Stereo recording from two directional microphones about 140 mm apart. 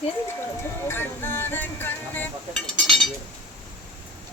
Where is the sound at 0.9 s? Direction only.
15° left (ahead or behind).